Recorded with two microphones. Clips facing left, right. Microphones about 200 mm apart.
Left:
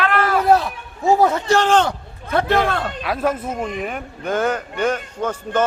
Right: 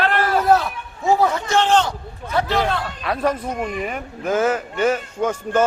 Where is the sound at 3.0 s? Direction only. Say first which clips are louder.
Right 1 dB; 5° left (ahead or behind).